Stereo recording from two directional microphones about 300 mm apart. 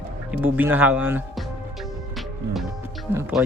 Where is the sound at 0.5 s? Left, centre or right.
Centre.